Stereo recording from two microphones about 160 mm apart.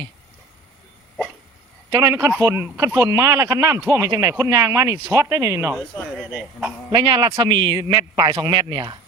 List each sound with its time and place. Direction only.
1.9 s speech: 20° right (ahead or behind)
5.7 s speech: 5° right (ahead or behind)
6.9 s speech: 30° right (ahead or behind)